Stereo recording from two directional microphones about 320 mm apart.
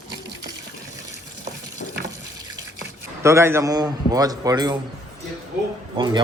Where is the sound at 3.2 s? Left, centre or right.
Centre.